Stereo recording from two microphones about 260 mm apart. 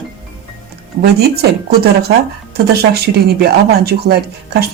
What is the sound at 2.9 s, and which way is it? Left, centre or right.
Speech, right.